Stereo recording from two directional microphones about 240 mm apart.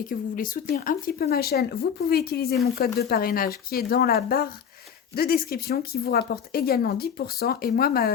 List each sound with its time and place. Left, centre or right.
0.1 s speech: left